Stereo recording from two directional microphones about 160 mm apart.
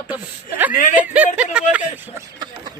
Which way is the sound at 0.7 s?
55° left (ahead or behind).